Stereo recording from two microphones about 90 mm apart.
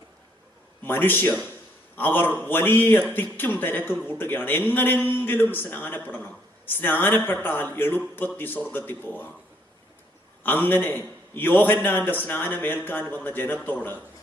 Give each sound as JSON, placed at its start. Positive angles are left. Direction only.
{"t": 0.9, "sound": "a man's voice", "side_deg": 20}
{"t": 10.4, "sound": "a man's voice", "side_deg": 20}